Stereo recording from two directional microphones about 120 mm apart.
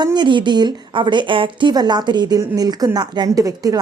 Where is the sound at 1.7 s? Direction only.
35° right (ahead or behind).